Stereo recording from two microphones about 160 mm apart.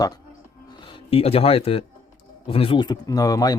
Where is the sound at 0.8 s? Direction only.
30° left (ahead or behind).